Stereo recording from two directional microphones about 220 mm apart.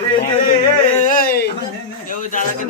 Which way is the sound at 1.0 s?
40° left (ahead or behind).